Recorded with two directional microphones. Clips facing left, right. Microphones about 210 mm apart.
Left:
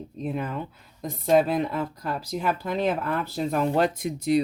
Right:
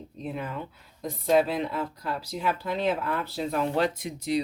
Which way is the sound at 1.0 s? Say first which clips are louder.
Left 2 dB; 50° left (ahead or behind).